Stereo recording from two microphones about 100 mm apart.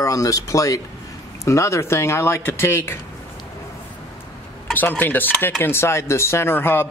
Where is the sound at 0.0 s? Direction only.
35° left (ahead or behind).